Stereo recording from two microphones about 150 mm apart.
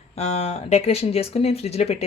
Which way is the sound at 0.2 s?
40° left (ahead or behind).